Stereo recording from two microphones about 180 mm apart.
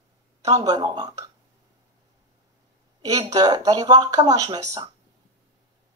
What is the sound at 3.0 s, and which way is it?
Speech, 20° right (ahead or behind).